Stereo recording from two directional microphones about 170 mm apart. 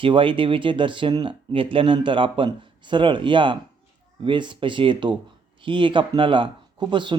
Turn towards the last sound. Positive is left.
turn(degrees=-25)  # may be behind; listen again after turning